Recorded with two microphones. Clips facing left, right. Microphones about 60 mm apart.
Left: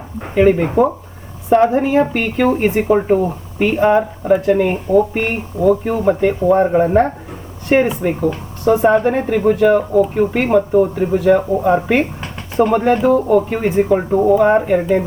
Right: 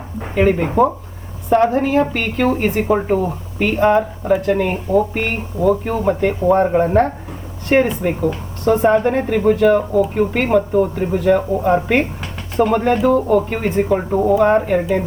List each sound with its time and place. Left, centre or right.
0.3 s speech: centre
1.5 s speech: centre
2.8 s speech: centre
4.3 s speech: left
5.5 s speech: centre